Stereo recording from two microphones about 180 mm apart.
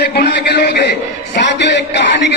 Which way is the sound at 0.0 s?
60° left (ahead or behind).